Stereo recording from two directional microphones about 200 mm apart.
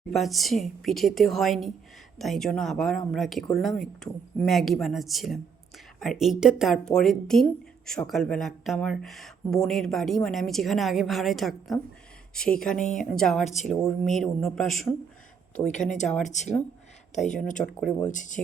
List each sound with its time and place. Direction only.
0.1 s speech: centre (ahead or behind)
15.6 s speech: 40° left (ahead or behind)
17.7 s speech: 10° left (ahead or behind)
18.1 s speech: 40° left (ahead or behind)